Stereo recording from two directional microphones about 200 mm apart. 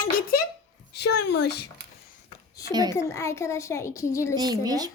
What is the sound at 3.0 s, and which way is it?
A child's voice, 15° left (ahead or behind).